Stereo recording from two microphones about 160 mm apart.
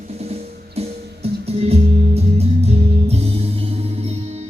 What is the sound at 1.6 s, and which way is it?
Music, 40° right (ahead or behind).